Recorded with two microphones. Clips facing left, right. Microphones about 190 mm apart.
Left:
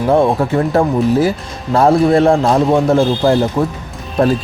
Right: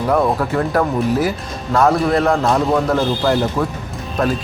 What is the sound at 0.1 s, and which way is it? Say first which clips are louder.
Speech: left 4 dB; 25° left (ahead or behind).